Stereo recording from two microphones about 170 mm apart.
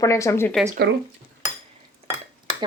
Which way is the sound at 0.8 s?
90° right.